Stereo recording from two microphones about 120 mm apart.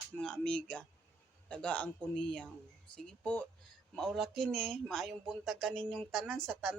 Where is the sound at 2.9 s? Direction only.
5° left (ahead or behind).